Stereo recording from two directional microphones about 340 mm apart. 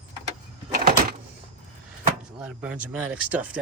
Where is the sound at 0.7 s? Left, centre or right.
Right.